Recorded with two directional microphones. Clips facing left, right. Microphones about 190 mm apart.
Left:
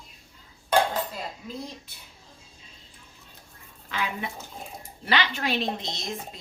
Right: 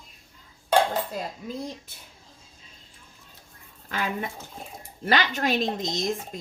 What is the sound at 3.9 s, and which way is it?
Speech, 45° right (ahead or behind).